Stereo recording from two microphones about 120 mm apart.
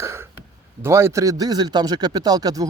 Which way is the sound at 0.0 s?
20° right (ahead or behind).